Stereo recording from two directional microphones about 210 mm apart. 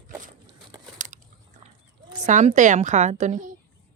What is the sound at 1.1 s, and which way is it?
Biting, 35° right (ahead or behind).